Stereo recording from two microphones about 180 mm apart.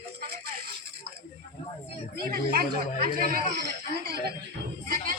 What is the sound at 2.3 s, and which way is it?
Speech, 55° right (ahead or behind).